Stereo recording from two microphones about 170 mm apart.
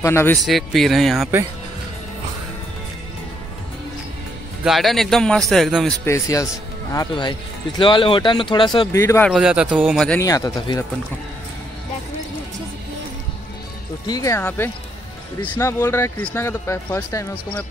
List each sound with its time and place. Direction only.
0.0 s speech: 15° left (ahead or behind)
0.4 s a man's voice: centre (ahead or behind)
4.6 s a man's voice: centre (ahead or behind)
6.0 s speech: 15° left (ahead or behind)
8.9 s speech: 15° left (ahead or behind)
9.3 s a man's voice: 5° right (ahead or behind)
9.9 s a man's voice: 5° left (ahead or behind)
10.2 s speech: 20° left (ahead or behind)
14.0 s speech: 20° left (ahead or behind)